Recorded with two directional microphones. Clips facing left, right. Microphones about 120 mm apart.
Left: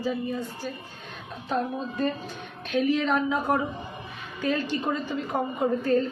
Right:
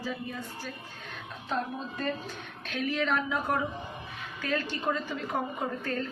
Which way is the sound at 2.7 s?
20° left (ahead or behind).